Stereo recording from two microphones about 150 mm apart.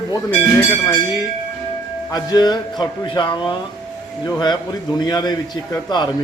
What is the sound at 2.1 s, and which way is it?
A man's voice, 25° left (ahead or behind).